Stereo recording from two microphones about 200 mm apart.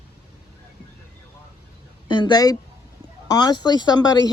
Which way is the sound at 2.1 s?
25° left (ahead or behind).